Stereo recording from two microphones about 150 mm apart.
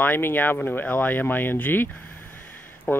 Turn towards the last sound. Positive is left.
turn(degrees=15)  # may be behind; listen again after turning